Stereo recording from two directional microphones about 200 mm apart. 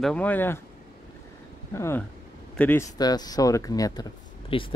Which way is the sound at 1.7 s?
10° left (ahead or behind).